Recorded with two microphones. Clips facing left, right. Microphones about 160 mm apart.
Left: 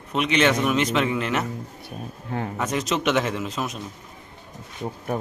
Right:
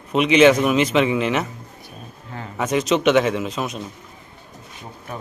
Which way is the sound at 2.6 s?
5° right (ahead or behind).